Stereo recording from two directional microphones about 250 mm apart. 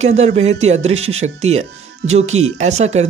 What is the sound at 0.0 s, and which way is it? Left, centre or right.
Speech, right.